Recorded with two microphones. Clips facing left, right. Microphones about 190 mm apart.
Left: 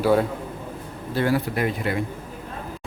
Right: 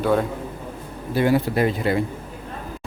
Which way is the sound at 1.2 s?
20° right (ahead or behind).